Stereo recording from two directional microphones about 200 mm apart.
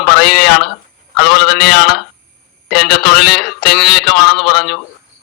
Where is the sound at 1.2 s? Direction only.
55° left (ahead or behind).